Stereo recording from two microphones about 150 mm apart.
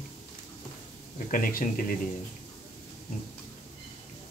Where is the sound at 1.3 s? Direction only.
65° left (ahead or behind).